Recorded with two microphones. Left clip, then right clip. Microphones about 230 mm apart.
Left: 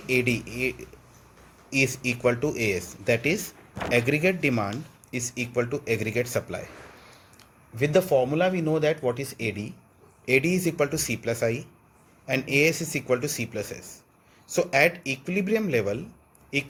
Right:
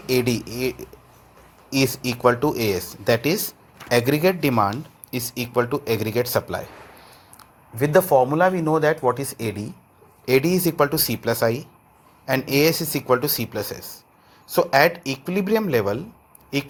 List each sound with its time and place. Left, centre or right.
0.1 s speech: centre
7.8 s speech: centre